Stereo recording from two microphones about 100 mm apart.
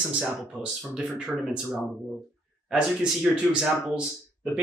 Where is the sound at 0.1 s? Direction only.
10° right (ahead or behind).